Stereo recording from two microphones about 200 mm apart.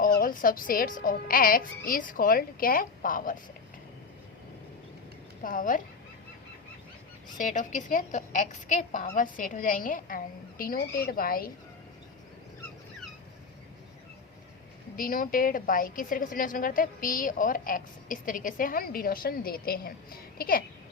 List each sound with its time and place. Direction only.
0.2 s a woman's voice: 45° left (ahead or behind)
5.4 s a woman's voice: 45° left (ahead or behind)
7.3 s a woman's voice: 40° left (ahead or behind)
14.9 s a woman's voice: 45° left (ahead or behind)